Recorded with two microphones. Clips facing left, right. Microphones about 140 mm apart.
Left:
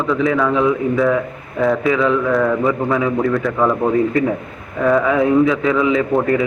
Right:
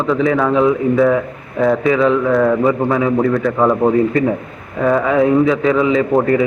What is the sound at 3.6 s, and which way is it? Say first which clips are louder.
A man's voice: right 3 dB; 20° right (ahead or behind).